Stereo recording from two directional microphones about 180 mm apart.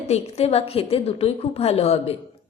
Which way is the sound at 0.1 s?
35° left (ahead or behind).